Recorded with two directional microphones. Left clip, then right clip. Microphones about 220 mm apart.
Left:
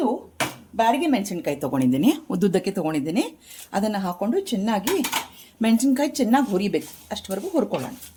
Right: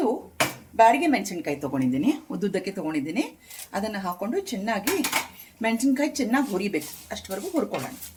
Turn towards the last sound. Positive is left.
turn(degrees=40)  # may be behind; listen again after turning